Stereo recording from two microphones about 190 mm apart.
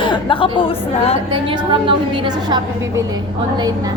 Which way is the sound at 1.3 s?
25° right (ahead or behind).